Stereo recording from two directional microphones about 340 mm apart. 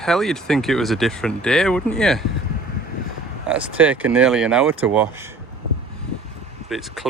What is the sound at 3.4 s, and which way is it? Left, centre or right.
Speech, centre.